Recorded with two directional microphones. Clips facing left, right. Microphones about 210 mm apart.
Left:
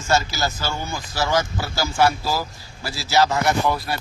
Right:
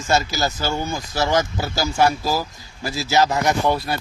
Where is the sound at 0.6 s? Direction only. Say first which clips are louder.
Right 4 dB; 45° right (ahead or behind).